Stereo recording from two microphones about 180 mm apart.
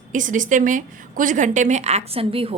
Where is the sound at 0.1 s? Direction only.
45° right (ahead or behind).